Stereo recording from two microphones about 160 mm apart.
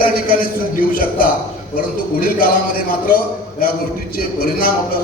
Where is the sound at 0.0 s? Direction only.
65° left (ahead or behind).